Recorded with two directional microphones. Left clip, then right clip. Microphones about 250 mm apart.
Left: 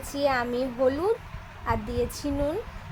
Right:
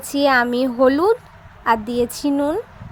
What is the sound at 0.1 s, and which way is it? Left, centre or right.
A woman's voice, right.